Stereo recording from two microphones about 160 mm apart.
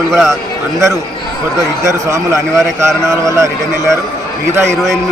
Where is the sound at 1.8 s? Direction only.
20° right (ahead or behind).